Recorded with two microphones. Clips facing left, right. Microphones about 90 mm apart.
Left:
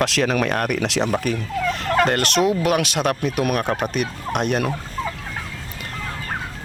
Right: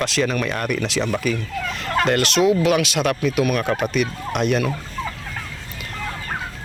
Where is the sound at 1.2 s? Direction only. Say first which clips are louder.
Left 1 dB; 50° left (ahead or behind).